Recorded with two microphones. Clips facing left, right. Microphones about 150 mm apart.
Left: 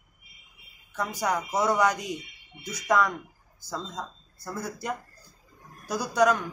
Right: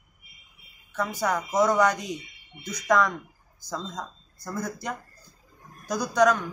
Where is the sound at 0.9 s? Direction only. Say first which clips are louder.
Right 1 dB; 15° left (ahead or behind).